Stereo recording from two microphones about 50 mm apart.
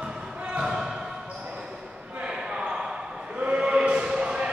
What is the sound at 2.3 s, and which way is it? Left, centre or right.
Basketball bounce, centre.